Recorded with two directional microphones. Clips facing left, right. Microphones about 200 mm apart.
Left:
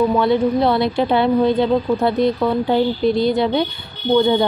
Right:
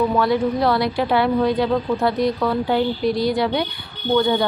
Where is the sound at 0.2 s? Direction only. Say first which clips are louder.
Left 3 dB; 25° left (ahead or behind).